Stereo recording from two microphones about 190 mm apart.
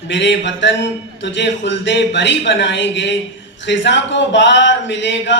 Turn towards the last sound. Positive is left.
turn(degrees=70)  # may be behind; listen again after turning